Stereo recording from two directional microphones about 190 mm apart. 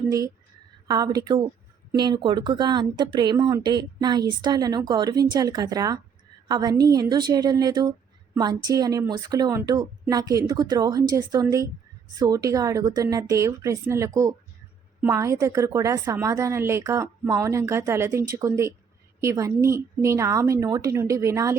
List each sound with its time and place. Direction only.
0.9 s speech: 20° right (ahead or behind)